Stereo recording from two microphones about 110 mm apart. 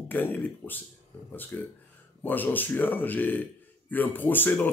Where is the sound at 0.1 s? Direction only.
15° left (ahead or behind).